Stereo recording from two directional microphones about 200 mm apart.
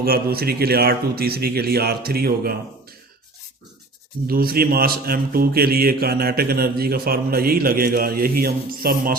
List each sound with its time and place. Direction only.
0.0 s a man's voice: 50° right (ahead or behind)
4.3 s a man's voice: 50° right (ahead or behind)